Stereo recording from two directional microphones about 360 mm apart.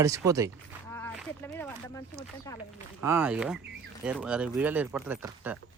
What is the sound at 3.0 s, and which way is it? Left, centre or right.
Speech, centre.